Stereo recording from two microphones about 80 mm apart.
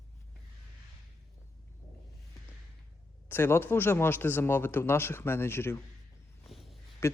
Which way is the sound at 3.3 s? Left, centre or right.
Left.